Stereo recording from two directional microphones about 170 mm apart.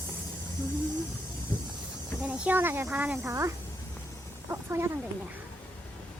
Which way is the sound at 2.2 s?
10° right (ahead or behind).